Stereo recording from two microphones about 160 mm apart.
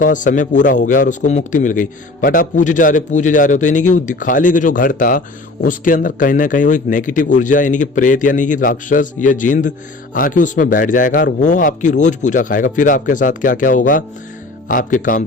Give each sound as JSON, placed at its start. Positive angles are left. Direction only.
{"t": 0.0, "sound": "a man's voice", "side_deg": 55}